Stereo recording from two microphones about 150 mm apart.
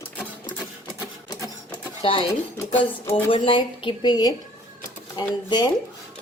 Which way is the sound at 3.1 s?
35° left (ahead or behind).